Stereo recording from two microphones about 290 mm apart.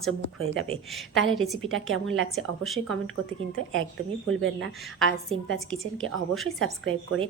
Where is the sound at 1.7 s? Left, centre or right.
Right.